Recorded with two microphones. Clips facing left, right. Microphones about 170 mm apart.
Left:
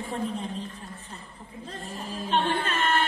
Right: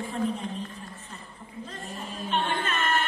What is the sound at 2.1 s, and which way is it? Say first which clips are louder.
Music: left 3 dB; 30° left (ahead or behind).